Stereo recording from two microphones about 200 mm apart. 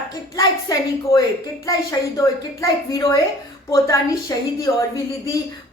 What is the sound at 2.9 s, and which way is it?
A woman's voice, 15° left (ahead or behind).